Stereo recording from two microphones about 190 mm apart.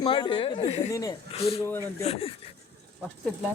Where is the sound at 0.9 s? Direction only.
20° left (ahead or behind).